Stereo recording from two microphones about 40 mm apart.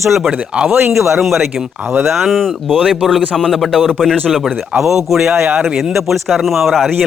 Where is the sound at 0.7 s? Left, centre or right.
Right.